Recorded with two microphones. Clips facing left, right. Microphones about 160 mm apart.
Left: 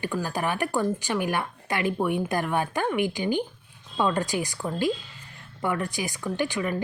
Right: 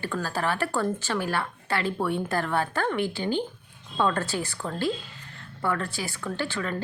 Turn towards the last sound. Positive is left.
turn(degrees=15)  # may be behind; listen again after turning